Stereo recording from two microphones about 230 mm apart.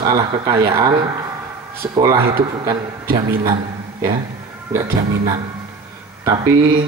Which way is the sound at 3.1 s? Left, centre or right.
Right.